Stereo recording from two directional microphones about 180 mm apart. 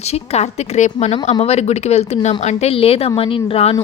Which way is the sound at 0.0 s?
35° left (ahead or behind).